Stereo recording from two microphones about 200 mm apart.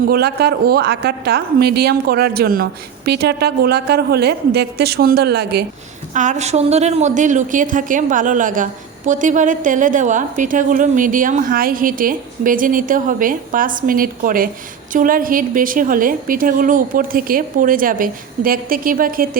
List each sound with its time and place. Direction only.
0.1 s a woman's voice: 55° right (ahead or behind)
6.1 s a woman's voice: 35° right (ahead or behind)